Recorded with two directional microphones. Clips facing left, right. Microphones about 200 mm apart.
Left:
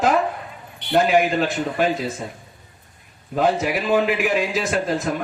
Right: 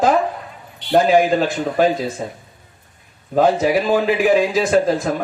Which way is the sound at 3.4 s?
35° right (ahead or behind).